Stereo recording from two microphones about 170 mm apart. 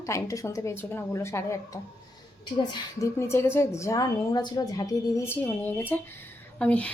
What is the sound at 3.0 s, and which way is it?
A woman's voice, 15° left (ahead or behind).